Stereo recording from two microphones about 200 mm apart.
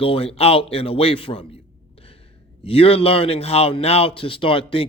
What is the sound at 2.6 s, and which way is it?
A man's voice, 30° left (ahead or behind).